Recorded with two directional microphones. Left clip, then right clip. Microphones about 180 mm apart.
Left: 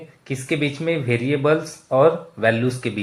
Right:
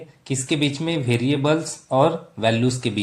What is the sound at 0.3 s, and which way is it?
Speech, 25° right (ahead or behind).